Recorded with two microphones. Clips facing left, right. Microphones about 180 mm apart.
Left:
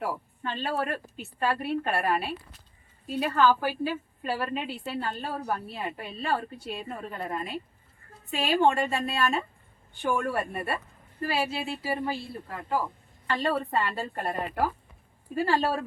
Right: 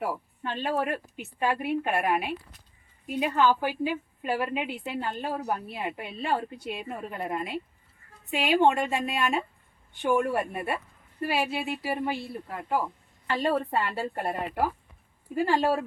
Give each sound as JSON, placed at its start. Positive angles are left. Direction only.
{"t": 0.0, "sound": "a woman's voice", "side_deg": -10}